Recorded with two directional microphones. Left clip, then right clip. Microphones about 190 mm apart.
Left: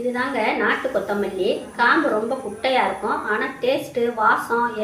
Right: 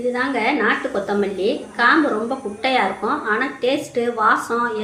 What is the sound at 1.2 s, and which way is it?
Speech, 40° right (ahead or behind).